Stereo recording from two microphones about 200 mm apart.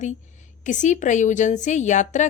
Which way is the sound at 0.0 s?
35° left (ahead or behind).